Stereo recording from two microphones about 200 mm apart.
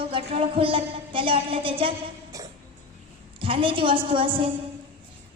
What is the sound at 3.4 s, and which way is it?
A woman's voice, 25° right (ahead or behind).